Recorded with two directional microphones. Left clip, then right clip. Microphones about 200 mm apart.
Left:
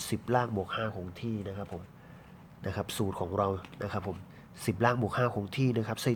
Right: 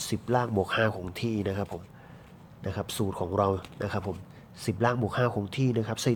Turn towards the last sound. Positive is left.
turn(degrees=0)  # may be behind; listen again after turning